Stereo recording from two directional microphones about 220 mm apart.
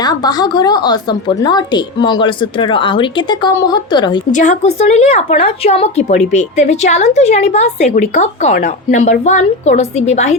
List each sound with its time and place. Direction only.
0.0 s a woman's voice: 20° left (ahead or behind)
4.3 s a woman's voice: 35° left (ahead or behind)